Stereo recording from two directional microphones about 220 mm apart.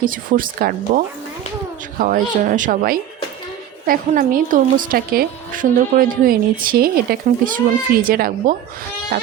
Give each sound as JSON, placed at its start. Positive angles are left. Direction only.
{"t": 0.0, "sound": "a woman's voice", "side_deg": -40}